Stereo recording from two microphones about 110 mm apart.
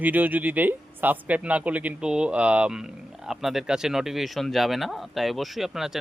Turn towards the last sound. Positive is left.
turn(degrees=-5)  # may be behind; listen again after turning